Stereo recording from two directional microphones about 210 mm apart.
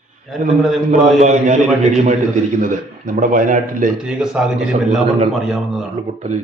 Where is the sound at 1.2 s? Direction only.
35° right (ahead or behind).